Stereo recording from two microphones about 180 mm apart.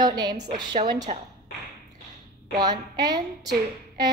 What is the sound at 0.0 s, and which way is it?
Child singing, 20° right (ahead or behind).